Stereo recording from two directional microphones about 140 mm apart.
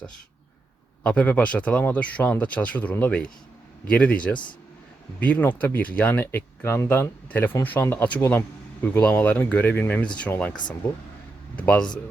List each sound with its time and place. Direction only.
1.0 s speech: 10° left (ahead or behind)
10.5 s speech: 30° left (ahead or behind)
11.5 s speech: 10° left (ahead or behind)